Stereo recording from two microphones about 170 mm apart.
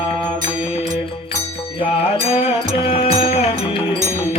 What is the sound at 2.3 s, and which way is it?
Music, 35° left (ahead or behind).